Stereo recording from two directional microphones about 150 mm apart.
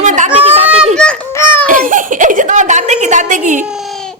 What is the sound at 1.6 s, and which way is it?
Giggle, 65° right (ahead or behind).